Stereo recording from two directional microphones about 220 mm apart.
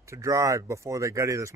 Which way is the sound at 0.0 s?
15° right (ahead or behind).